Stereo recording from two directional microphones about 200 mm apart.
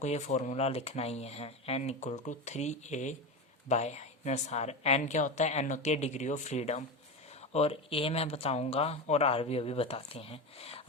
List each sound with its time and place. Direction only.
0.0 s speech: 35° left (ahead or behind)